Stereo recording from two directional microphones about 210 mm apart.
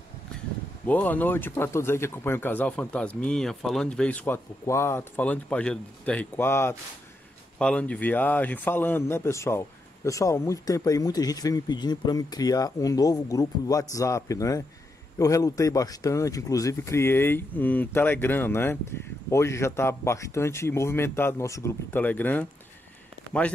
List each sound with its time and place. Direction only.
0.8 s speech: 10° left (ahead or behind)